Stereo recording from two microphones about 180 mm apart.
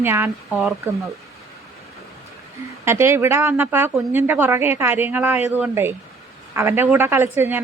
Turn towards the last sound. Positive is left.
turn(degrees=-10)  # may be behind; listen again after turning